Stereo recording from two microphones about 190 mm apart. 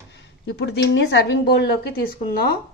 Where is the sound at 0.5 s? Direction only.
65° left (ahead or behind).